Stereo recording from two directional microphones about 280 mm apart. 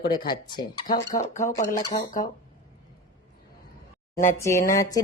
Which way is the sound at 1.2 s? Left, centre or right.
Left.